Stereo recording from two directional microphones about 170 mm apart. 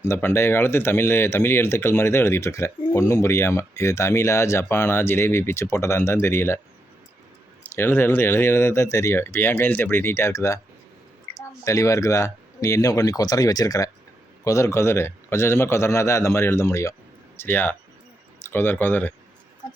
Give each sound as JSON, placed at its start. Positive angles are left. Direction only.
{"t": 0.0, "sound": "speech", "side_deg": 15}
{"t": 7.6, "sound": "speech", "side_deg": 15}